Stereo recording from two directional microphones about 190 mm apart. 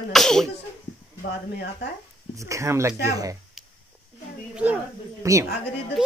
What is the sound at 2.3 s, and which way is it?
Speech, 15° right (ahead or behind).